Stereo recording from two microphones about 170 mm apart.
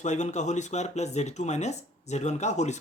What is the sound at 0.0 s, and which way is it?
Speech, 45° left (ahead or behind).